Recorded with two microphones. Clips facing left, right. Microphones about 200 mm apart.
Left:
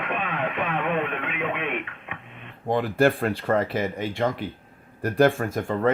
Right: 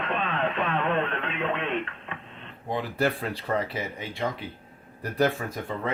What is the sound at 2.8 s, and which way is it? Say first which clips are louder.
Speech: left 6 dB; 50° left (ahead or behind).